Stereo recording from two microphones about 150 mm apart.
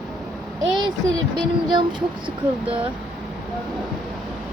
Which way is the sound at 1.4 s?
30° right (ahead or behind).